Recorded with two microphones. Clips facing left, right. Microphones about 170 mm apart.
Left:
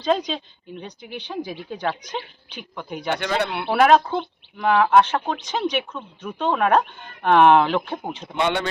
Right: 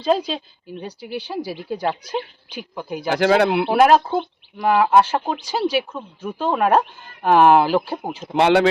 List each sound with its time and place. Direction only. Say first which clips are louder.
0.0 s speech: right 2 dB; 5° right (ahead or behind)
3.1 s speech: right 8 dB; 80° right
3.7 s speech: left 1 dB; 5° right (ahead or behind)
8.3 s speech: right 8 dB; 75° right (ahead or behind)